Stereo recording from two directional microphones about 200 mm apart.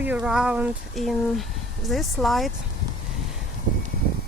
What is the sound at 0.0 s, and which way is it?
Speech, 5° right (ahead or behind).